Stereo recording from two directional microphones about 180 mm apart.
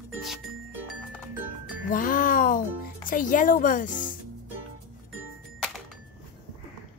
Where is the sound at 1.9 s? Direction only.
50° left (ahead or behind).